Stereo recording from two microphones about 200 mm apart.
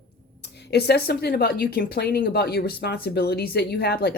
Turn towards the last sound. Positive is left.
turn(degrees=50)  # may be behind; listen again after turning